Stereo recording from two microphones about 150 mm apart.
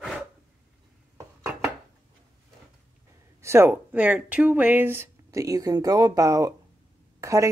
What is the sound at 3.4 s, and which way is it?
Speech, 15° right (ahead or behind).